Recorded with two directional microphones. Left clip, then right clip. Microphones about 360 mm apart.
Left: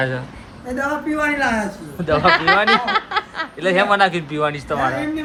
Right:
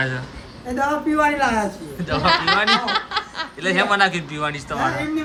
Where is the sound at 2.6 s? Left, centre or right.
Centre.